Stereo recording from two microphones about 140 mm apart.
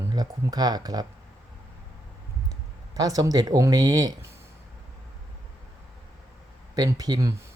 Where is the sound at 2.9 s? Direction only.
25° right (ahead or behind).